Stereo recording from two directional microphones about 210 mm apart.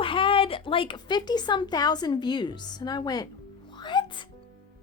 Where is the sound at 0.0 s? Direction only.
25° left (ahead or behind).